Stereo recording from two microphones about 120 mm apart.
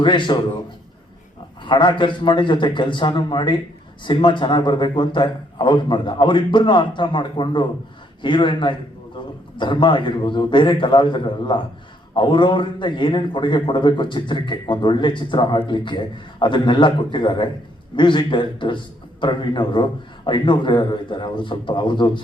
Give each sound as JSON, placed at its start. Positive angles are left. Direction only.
{"t": 0.0, "sound": "a man's voice", "side_deg": 40}
{"t": 1.6, "sound": "a man's voice", "side_deg": 40}